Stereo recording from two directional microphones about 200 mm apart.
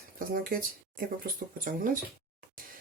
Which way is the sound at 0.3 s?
45° right (ahead or behind).